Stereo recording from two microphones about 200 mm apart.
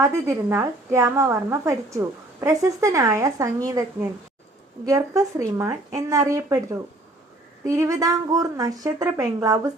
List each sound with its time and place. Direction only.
0.0 s a woman's voice: 15° right (ahead or behind)
4.9 s a woman's voice: 15° right (ahead or behind)
7.6 s a woman's voice: 15° right (ahead or behind)